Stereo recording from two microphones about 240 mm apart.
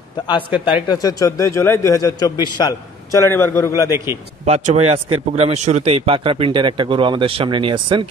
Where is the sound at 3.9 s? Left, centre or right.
Centre.